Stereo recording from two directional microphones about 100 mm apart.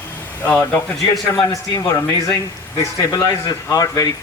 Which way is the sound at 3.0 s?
35° left (ahead or behind).